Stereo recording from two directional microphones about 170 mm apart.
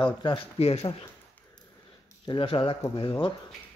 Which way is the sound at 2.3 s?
30° left (ahead or behind).